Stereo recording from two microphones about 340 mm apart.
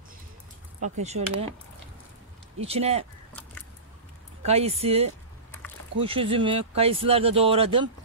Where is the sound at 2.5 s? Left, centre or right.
Centre.